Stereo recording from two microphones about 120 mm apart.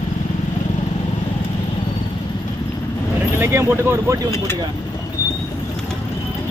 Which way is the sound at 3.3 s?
20° right (ahead or behind).